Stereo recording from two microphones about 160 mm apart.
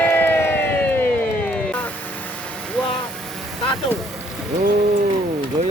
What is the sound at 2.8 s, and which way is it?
Vehicle, 5° left (ahead or behind).